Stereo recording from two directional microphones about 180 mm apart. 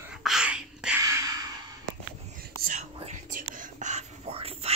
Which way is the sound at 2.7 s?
40° right (ahead or behind).